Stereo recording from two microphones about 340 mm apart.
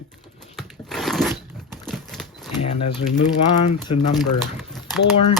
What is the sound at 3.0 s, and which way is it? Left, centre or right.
Speech, left.